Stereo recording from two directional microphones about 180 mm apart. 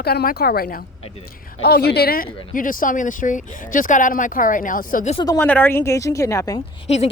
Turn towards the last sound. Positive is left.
turn(degrees=40)  # may be behind; listen again after turning